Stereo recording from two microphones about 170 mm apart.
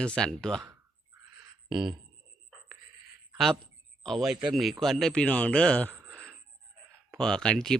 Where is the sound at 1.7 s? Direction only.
25° right (ahead or behind).